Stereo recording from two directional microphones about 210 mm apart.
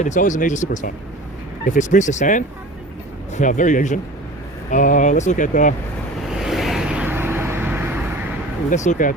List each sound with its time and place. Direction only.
0.0 s speech: 35° left (ahead or behind)
6.2 s vehicle: centre (ahead or behind)
8.7 s speech: 35° left (ahead or behind)